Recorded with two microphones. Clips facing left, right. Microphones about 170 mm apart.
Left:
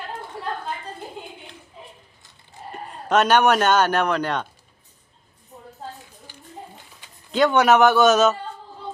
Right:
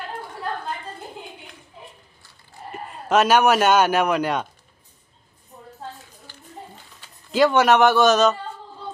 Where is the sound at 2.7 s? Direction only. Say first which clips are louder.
Right 1 dB; 5° right (ahead or behind).